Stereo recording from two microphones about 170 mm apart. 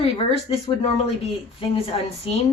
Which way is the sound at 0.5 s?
30° left (ahead or behind).